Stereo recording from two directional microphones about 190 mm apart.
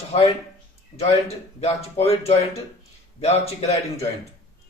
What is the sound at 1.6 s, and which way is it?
A man's voice, 35° left (ahead or behind).